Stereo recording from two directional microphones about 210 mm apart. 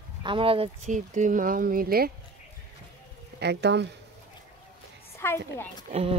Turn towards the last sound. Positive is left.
turn(degrees=-30)  # may be behind; listen again after turning